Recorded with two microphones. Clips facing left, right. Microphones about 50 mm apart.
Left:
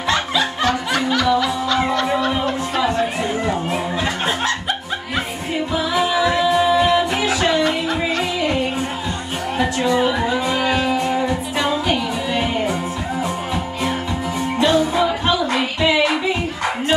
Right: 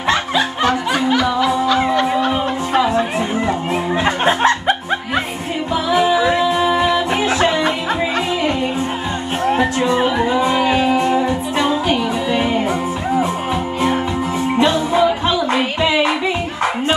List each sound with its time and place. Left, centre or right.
0.1 s music: right
4.0 s music: right
5.9 s music: right
9.5 s music: right
10.0 s music: centre
14.6 s music: right